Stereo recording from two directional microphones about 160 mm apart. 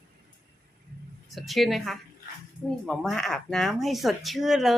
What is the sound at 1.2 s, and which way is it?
Speech, centre (ahead or behind).